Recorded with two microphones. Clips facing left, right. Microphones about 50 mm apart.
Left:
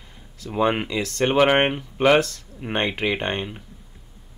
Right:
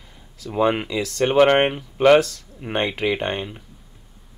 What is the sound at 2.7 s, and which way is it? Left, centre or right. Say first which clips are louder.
Speech: right 1 dB; centre.